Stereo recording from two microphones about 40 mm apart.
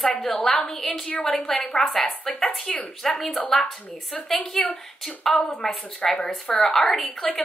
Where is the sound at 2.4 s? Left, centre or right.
Centre.